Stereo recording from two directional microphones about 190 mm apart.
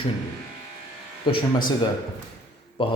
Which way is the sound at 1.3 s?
25° left (ahead or behind).